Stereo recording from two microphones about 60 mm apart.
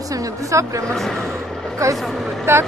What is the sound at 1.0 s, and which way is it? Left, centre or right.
A man's voice, centre.